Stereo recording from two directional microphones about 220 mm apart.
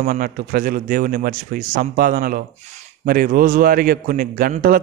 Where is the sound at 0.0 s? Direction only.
40° right (ahead or behind).